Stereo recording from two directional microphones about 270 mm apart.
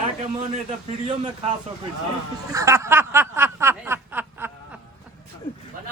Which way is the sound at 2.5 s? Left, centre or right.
Centre.